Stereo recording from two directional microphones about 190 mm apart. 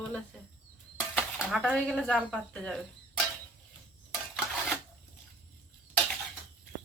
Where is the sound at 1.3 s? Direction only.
Centre (ahead or behind).